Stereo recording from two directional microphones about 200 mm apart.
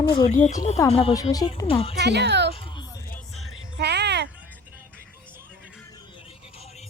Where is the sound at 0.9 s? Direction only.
30° left (ahead or behind).